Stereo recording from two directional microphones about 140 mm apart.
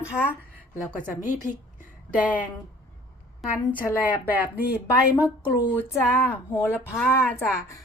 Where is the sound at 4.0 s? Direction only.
10° right (ahead or behind).